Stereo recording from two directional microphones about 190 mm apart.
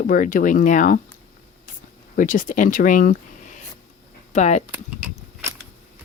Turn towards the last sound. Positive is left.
turn(degrees=-10)  # may be behind; listen again after turning